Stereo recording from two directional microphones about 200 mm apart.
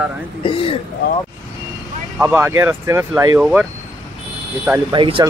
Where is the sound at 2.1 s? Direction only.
10° right (ahead or behind).